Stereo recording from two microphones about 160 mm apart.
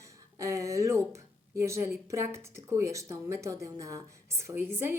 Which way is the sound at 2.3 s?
15° right (ahead or behind).